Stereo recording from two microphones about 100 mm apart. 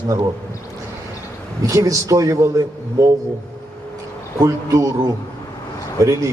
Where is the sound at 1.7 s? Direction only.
35° right (ahead or behind).